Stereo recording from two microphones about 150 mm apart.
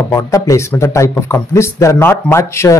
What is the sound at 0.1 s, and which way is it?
Speech, 20° left (ahead or behind).